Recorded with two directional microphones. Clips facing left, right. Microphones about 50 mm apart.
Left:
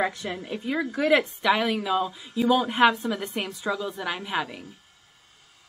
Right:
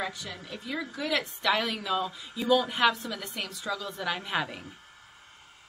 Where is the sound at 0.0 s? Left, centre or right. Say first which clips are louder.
Left 8 dB; left.